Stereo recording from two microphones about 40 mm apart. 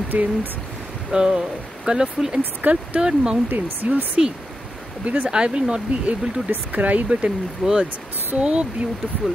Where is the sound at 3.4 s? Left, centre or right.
Right.